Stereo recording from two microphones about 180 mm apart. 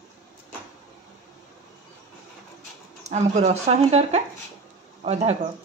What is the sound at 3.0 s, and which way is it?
Speech, 40° right (ahead or behind).